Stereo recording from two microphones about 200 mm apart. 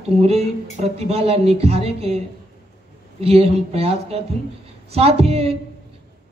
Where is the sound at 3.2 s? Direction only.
30° right (ahead or behind).